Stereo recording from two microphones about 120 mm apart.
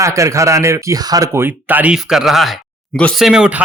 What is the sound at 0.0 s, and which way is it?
Speech, 25° right (ahead or behind).